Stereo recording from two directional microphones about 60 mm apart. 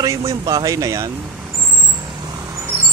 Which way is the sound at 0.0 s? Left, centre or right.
Right.